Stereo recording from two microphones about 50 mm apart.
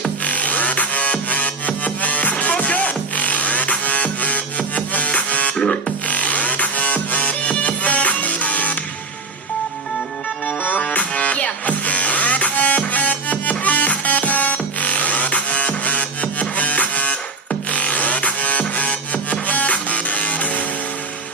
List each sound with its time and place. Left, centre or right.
0.3 s music: left
10.4 s music: left